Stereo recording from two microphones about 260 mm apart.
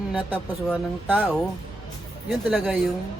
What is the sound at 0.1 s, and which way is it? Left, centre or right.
Speech, centre.